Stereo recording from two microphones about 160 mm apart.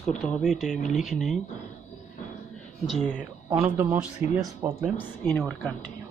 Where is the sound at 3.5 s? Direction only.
15° right (ahead or behind).